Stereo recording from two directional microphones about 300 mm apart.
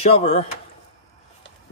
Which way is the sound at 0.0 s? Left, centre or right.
Centre.